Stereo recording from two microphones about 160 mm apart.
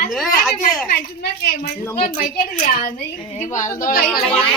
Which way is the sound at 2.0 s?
60° left (ahead or behind).